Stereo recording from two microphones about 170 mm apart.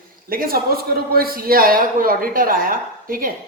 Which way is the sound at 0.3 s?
60° right (ahead or behind).